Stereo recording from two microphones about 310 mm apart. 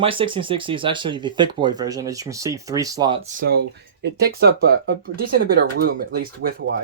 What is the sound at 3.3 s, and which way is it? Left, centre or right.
Speech, right.